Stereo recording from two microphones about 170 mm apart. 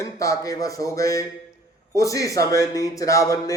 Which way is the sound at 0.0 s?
20° left (ahead or behind).